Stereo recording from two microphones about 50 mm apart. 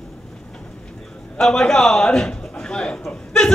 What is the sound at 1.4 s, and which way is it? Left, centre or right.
A man's voice, centre.